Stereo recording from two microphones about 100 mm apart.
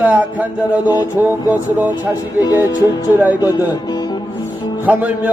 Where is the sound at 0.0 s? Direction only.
15° right (ahead or behind).